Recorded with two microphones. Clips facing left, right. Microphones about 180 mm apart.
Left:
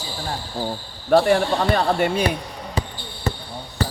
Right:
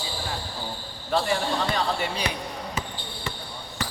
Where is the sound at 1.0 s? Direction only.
55° left (ahead or behind).